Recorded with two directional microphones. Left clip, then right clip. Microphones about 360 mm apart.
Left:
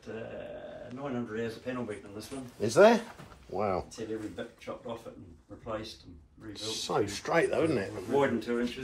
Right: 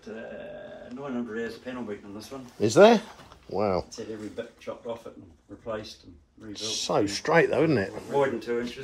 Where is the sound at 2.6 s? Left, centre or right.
Right.